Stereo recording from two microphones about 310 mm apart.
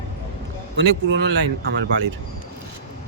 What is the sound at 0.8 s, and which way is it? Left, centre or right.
Speech, right.